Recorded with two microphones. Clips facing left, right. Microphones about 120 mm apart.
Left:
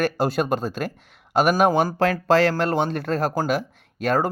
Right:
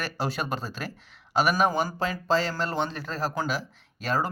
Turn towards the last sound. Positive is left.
turn(degrees=55)  # may be behind; listen again after turning